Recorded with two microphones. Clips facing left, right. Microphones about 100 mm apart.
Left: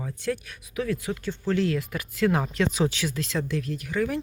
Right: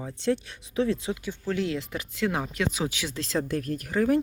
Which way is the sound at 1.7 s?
20° right (ahead or behind).